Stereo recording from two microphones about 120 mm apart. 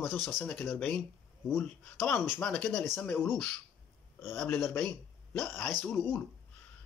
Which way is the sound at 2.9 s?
15° left (ahead or behind).